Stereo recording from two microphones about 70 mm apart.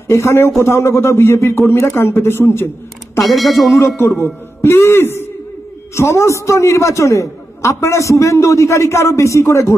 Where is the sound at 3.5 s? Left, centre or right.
Left.